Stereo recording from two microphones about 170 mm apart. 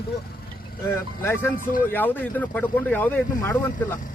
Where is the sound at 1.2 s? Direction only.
15° left (ahead or behind).